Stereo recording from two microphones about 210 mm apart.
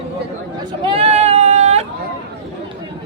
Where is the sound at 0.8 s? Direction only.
25° right (ahead or behind).